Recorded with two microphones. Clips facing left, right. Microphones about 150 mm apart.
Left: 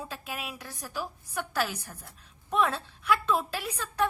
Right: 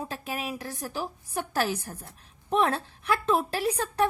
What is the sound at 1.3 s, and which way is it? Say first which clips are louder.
Speech: right 3 dB; 40° right (ahead or behind).